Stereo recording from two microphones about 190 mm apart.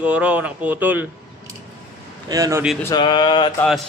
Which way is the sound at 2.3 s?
15° right (ahead or behind).